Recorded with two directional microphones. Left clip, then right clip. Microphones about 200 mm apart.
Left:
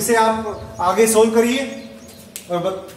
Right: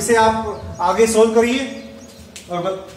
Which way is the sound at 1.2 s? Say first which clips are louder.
Right 1 dB; 40° left (ahead or behind).